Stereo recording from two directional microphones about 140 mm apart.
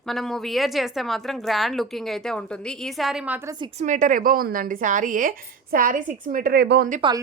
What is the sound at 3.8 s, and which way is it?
A woman's voice, 65° right (ahead or behind).